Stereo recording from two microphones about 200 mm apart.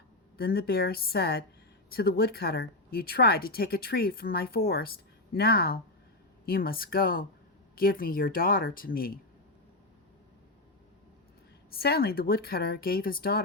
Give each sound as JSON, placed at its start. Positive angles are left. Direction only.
{"t": 0.3, "sound": "speech", "side_deg": 50}
{"t": 11.7, "sound": "speech", "side_deg": 50}